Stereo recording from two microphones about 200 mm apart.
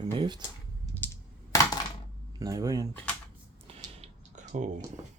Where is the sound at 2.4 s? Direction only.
15° right (ahead or behind).